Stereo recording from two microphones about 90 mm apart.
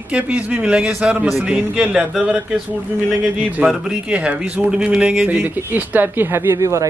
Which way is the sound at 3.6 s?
15° right (ahead or behind).